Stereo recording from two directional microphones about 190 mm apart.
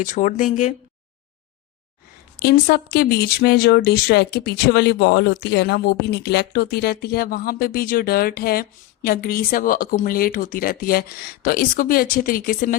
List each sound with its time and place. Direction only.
0.0 s speech: 40° left (ahead or behind)
2.4 s speech: 55° left (ahead or behind)